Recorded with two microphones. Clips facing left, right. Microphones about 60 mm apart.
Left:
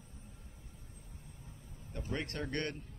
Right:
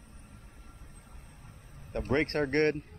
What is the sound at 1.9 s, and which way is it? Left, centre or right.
Speech, right.